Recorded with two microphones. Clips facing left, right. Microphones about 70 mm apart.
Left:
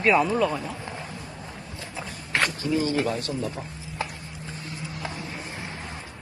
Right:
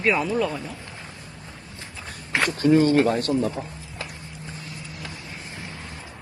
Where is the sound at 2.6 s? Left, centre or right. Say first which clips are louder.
Right 7 dB; right.